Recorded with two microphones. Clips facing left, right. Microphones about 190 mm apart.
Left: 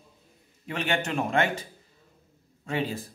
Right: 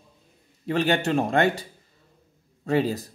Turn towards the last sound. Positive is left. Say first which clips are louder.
# right 7 dB
turn(degrees=-40)  # may be behind; listen again after turning